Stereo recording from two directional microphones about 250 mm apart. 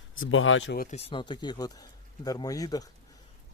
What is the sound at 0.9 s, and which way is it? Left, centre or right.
Speech, left.